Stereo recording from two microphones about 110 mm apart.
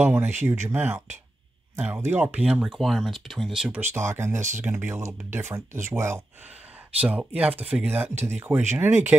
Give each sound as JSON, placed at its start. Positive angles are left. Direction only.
{"t": 0.0, "sound": "speech", "side_deg": -20}
{"t": 3.8, "sound": "speech", "side_deg": -25}
{"t": 7.0, "sound": "speech", "side_deg": -15}
{"t": 8.1, "sound": "speech", "side_deg": -90}
{"t": 8.4, "sound": "speech", "side_deg": -20}